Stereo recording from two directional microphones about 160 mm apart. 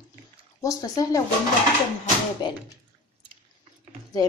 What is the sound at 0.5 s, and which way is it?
Speech, 20° left (ahead or behind).